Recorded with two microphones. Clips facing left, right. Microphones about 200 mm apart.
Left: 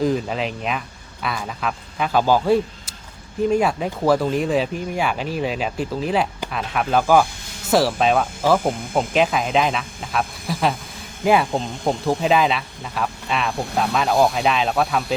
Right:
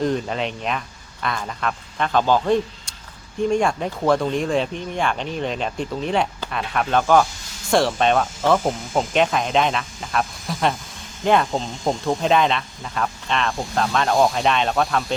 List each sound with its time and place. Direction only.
0.0 s speech: centre (ahead or behind)
8.7 s speech: 55° left (ahead or behind)
9.0 s speech: 5° left (ahead or behind)